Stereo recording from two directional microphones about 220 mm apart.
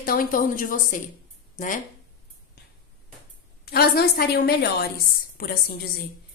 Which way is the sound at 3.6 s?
45° left (ahead or behind).